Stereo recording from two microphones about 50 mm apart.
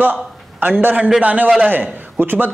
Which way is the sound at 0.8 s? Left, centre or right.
Right.